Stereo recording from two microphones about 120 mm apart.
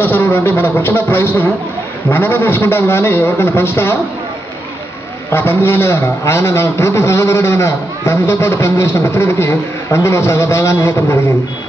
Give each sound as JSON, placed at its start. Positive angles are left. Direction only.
{"t": 0.0, "sound": "a man's voice", "side_deg": 15}
{"t": 5.3, "sound": "a man's voice", "side_deg": 20}